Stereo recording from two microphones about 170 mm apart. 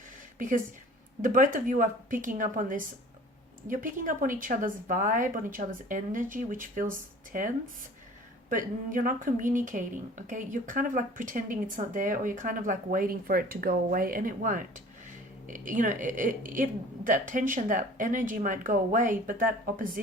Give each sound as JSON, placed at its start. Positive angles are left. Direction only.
{"t": 1.2, "sound": "speech", "side_deg": -50}